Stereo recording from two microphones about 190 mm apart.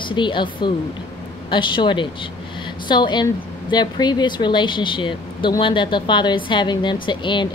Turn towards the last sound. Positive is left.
turn(degrees=25)  # may be behind; listen again after turning